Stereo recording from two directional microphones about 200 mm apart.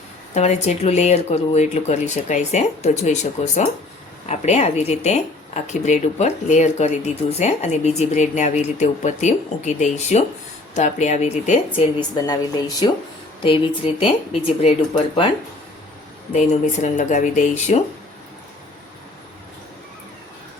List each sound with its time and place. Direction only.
0.3 s speech: 35° left (ahead or behind)
12.1 s speech: 20° left (ahead or behind)
16.3 s speech: 35° left (ahead or behind)